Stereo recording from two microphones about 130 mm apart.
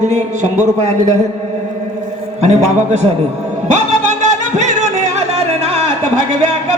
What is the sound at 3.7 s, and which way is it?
Music, 65° right (ahead or behind).